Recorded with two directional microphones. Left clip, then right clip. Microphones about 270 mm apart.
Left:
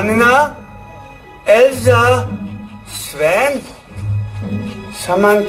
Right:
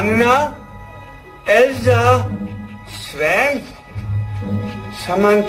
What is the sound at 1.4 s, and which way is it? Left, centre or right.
Music, left.